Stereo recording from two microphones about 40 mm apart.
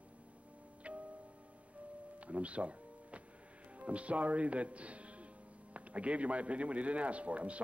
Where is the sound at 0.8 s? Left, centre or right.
Right.